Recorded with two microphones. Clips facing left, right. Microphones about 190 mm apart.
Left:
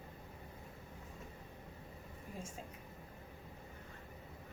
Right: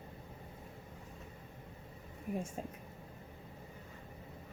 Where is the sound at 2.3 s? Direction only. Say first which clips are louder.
Right 11 dB; 60° right (ahead or behind).